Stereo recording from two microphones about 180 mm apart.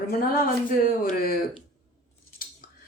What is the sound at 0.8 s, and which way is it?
Speech, 55° left (ahead or behind).